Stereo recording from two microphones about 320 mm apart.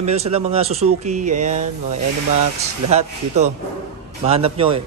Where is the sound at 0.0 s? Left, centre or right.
Centre.